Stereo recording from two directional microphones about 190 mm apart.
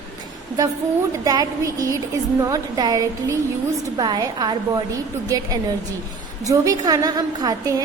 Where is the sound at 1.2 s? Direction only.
20° right (ahead or behind).